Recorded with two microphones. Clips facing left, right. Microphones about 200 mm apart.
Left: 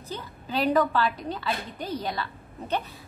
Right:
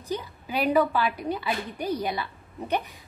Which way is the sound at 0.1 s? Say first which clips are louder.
Right 2 dB; 10° right (ahead or behind).